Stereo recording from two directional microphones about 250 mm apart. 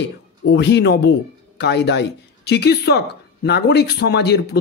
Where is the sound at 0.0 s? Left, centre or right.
Left.